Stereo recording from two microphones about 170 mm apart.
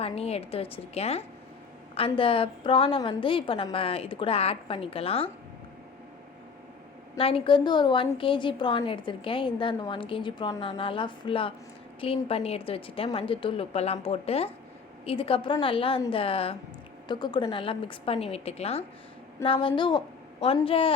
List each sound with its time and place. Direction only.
0.0 s a woman's voice: 35° left (ahead or behind)
7.2 s a woman's voice: 35° left (ahead or behind)